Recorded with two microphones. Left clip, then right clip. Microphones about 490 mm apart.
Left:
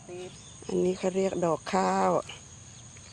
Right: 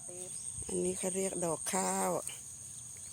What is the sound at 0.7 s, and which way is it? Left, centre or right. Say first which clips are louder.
Speech: left 8 dB; right.